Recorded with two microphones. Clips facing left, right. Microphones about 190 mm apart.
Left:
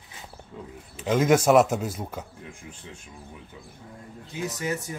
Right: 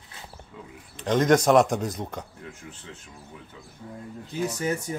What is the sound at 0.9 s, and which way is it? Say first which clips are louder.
Speech: even; 5° left (ahead or behind).